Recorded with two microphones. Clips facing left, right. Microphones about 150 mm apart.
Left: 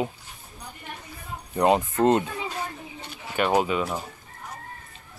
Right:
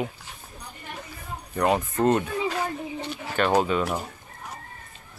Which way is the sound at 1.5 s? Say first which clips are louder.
Left 2 dB; 20° left (ahead or behind).